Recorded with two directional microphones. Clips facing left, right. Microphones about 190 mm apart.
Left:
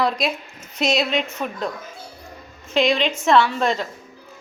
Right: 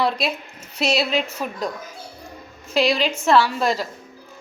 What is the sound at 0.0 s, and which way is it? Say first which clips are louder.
A woman's voice: even; centre (ahead or behind).